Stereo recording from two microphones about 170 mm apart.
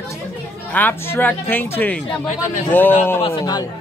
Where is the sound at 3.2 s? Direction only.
25° left (ahead or behind).